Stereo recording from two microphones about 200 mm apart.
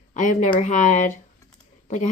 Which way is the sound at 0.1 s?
40° left (ahead or behind).